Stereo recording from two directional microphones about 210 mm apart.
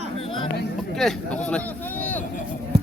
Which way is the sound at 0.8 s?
Centre (ahead or behind).